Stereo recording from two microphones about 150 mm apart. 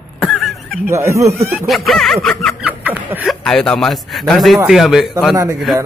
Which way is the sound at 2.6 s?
10° right (ahead or behind).